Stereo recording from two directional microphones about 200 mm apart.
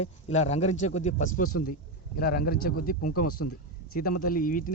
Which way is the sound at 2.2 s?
50° left (ahead or behind).